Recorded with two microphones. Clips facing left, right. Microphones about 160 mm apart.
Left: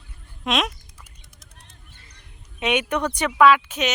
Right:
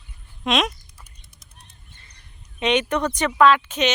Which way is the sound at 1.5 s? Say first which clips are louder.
Right 1 dB; 90° left.